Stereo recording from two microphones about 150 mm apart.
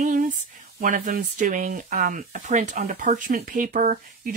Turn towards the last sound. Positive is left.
turn(degrees=-60)  # may be behind; listen again after turning